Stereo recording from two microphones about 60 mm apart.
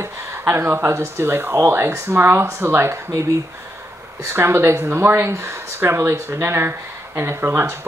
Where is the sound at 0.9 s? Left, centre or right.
Right.